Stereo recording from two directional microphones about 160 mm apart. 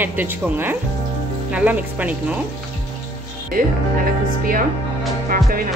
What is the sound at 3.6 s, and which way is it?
Music, 60° right (ahead or behind).